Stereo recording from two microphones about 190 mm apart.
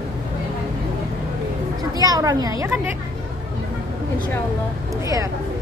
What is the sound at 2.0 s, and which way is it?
Speech, 20° right (ahead or behind).